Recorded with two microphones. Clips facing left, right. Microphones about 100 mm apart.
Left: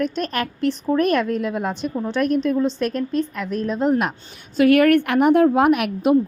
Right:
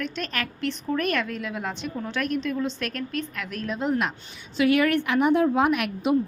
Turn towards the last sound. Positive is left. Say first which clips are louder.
# left 6 dB
turn(degrees=55)  # may be behind; listen again after turning